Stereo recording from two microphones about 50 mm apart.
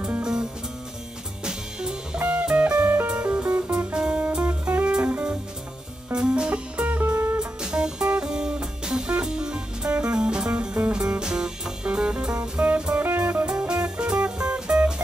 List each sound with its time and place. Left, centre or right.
0.2 s music: centre; by 3.7 s right
3.9 s music: right
6.1 s music: centre
7.0 s music: right
7.3 s music: centre
12.9 s music: right
13.5 s music: centre